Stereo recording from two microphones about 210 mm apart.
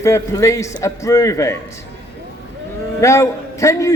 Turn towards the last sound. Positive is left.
turn(degrees=15)  # may be behind; listen again after turning